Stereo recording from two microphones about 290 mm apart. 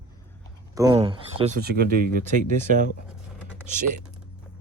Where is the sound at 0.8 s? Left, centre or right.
Centre.